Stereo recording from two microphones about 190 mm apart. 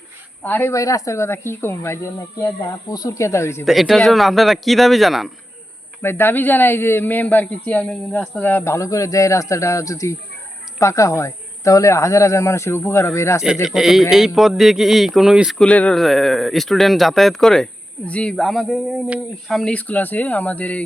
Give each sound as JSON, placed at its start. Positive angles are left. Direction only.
{"t": 0.4, "sound": "speech", "side_deg": 10}
{"t": 3.7, "sound": "speech", "side_deg": 0}
{"t": 6.0, "sound": "speech", "side_deg": 10}
{"t": 13.4, "sound": "speech", "side_deg": 0}